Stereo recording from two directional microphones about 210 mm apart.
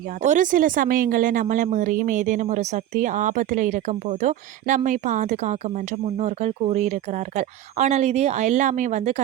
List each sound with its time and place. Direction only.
0.2 s speech: 35° right (ahead or behind)